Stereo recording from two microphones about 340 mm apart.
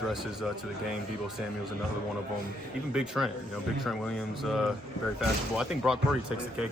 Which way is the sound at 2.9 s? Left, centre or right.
Centre.